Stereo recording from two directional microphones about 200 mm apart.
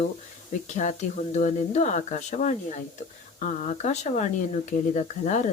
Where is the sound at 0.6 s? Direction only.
35° left (ahead or behind).